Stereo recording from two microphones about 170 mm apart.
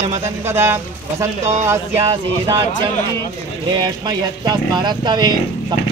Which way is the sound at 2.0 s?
25° right (ahead or behind).